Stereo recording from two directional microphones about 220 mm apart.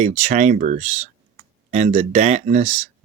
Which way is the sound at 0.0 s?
35° right (ahead or behind).